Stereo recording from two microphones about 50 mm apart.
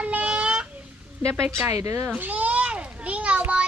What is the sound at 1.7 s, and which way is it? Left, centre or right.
Speech, right.